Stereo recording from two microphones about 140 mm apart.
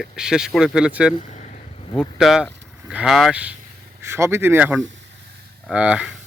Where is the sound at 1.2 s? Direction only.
55° left (ahead or behind).